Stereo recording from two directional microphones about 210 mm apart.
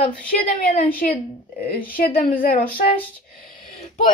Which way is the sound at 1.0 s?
45° left (ahead or behind).